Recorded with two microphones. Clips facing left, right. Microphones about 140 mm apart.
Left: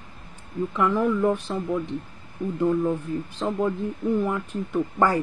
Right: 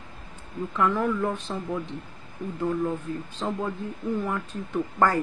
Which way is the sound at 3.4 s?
Centre (ahead or behind).